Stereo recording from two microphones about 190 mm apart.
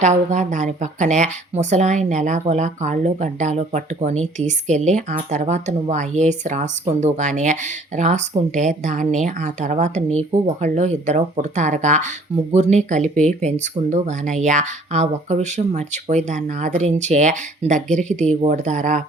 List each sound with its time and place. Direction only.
0.0 s speech: 40° right (ahead or behind)